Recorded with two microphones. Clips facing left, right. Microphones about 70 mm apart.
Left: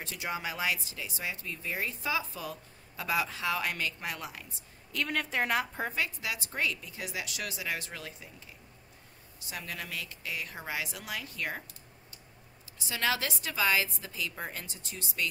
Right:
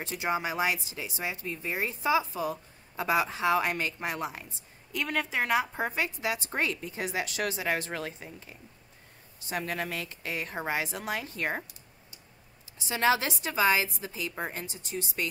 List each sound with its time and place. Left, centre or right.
0.0 s speech: right
4.9 s a woman's voice: centre; by 11.6 s right
12.7 s speech: right